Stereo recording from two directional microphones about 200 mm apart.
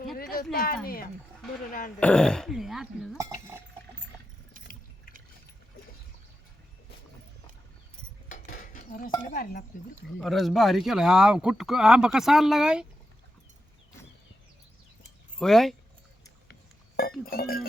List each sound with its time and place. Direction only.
0.5 s speech: 45° left (ahead or behind)
2.0 s speech: 5° left (ahead or behind)
3.2 s a sound: 15° right (ahead or behind)
8.3 s cutlery: 45° left (ahead or behind)
9.2 s speech: 45° left (ahead or behind)
10.2 s speech: centre (ahead or behind)
15.4 s speech: centre (ahead or behind)
17.0 s speech: 50° left (ahead or behind)